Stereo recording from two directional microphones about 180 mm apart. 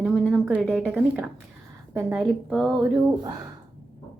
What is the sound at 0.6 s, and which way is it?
Speech, 5° left (ahead or behind).